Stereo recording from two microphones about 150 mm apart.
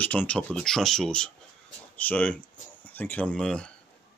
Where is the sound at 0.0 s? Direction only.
10° left (ahead or behind).